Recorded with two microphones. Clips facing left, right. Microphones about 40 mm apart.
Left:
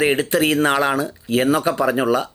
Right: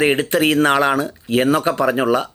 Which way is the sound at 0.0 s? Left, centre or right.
Right.